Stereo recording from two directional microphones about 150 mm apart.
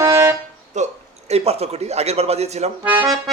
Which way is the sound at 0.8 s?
50° right (ahead or behind).